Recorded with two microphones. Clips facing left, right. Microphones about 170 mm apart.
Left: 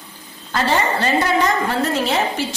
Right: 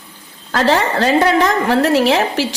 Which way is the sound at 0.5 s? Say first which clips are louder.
Right 4 dB; 90° right.